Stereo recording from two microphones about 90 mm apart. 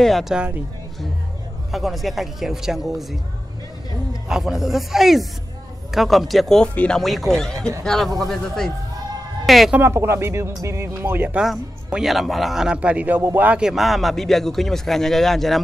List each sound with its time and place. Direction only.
0.0 s speech: centre (ahead or behind)
1.7 s speech: centre (ahead or behind)
4.3 s speech: 5° right (ahead or behind)
6.7 s speech: 15° left (ahead or behind)
7.0 s speech: centre (ahead or behind)
9.8 s speech: 30° right (ahead or behind)
11.3 s a man's voice: 5° right (ahead or behind)
13.6 s speech: 5° right (ahead or behind)